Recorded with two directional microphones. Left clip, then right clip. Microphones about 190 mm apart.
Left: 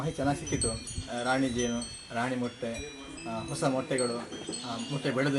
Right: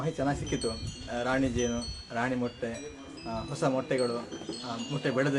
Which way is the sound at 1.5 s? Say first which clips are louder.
Right 1 dB; 25° right (ahead or behind).